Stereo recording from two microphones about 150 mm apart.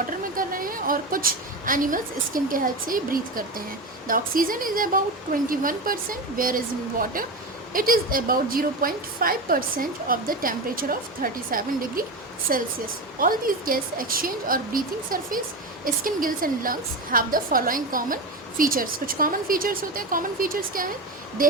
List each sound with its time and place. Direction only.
0.3 s a woman's voice: 70° right (ahead or behind)